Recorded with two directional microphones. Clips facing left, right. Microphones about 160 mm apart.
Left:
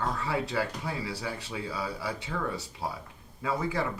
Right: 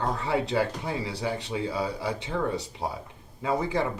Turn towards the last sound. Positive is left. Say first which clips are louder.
# right 4 dB
turn(degrees=-20)  # may be behind; listen again after turning